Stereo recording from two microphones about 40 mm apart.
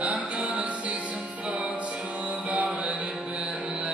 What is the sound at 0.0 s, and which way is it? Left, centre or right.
Music, right.